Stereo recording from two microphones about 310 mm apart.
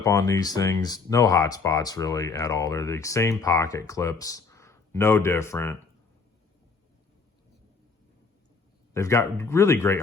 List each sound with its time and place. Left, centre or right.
0.0 s speech: centre
8.9 s speech: centre